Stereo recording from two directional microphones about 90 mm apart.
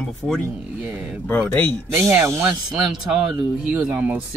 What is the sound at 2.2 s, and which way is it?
Speech, 35° right (ahead or behind).